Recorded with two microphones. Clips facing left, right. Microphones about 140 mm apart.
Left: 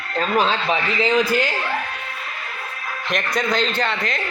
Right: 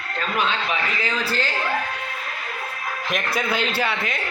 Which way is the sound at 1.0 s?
15° left (ahead or behind).